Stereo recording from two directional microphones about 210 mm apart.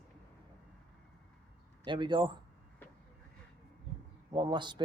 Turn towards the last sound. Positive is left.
turn(degrees=-20)  # may be behind; listen again after turning